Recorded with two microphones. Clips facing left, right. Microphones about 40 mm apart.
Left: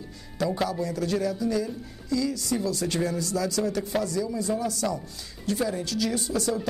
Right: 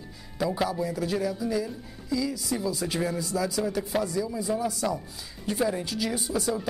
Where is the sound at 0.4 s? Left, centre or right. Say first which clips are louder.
Even; centre.